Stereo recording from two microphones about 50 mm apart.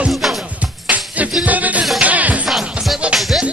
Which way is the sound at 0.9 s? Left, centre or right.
Right.